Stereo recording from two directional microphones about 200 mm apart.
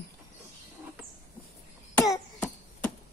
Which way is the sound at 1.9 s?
15° left (ahead or behind).